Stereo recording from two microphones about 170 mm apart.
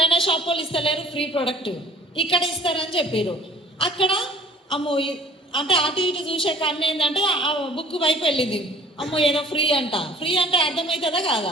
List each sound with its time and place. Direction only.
0.0 s a woman's voice: 30° left (ahead or behind)